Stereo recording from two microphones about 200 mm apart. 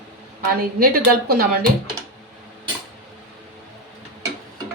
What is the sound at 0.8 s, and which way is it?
Speech, 50° right (ahead or behind).